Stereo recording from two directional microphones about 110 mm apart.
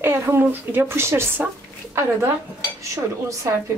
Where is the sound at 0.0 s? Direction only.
20° right (ahead or behind).